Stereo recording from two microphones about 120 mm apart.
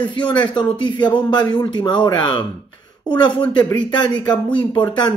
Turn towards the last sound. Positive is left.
turn(degrees=40)  # may be behind; listen again after turning